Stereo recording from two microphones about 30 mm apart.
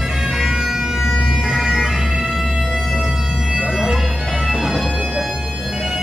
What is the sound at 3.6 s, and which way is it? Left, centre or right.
Bagpipes, right.